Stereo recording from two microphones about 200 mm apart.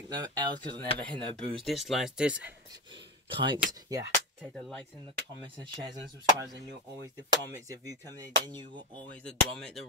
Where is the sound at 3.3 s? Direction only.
25° right (ahead or behind).